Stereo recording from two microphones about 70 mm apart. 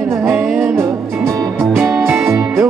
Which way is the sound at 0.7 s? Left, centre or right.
Right.